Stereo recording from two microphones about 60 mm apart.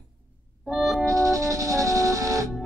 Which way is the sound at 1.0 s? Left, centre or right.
Right.